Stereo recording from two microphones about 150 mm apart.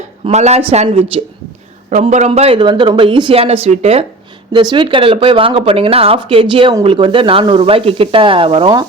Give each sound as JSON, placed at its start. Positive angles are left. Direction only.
{"t": 0.3, "sound": "speech", "side_deg": -45}
{"t": 1.9, "sound": "speech", "side_deg": -50}